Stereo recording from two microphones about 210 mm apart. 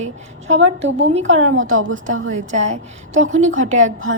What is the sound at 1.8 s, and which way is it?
Speech, 70° right (ahead or behind).